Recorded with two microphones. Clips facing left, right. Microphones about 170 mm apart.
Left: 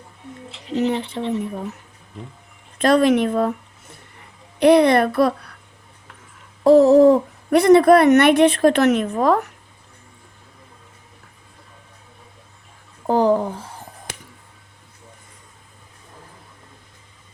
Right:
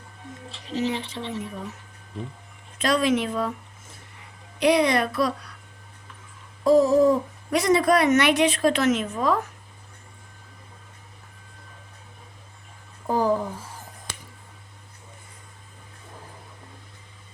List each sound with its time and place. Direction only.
0.7 s speech: 65° left (ahead or behind)
2.7 s speech: 55° left (ahead or behind)
6.7 s speech: 65° left (ahead or behind)
13.1 s a sound: 70° left (ahead or behind)